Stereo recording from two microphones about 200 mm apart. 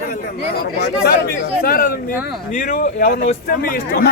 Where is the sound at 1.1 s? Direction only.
50° left (ahead or behind).